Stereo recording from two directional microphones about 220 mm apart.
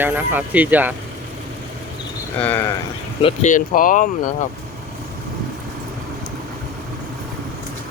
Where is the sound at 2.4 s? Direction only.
10° left (ahead or behind).